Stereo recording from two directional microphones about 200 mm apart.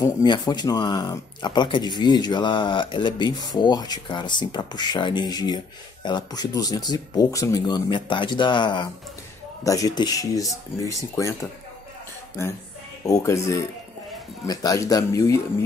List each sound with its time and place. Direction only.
0.0 s speech: 20° left (ahead or behind)
13.0 s speech: 15° left (ahead or behind)